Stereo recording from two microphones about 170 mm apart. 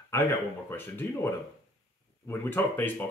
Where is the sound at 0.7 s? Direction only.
15° left (ahead or behind).